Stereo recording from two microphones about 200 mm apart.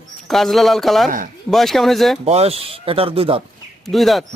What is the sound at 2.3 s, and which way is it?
Speech, 30° right (ahead or behind).